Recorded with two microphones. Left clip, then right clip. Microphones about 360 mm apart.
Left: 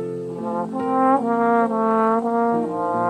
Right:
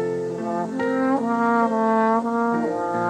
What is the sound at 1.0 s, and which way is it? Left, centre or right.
Brass instrument, centre.